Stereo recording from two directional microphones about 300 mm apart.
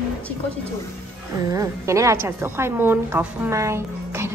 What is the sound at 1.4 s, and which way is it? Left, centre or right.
A woman's voice, centre.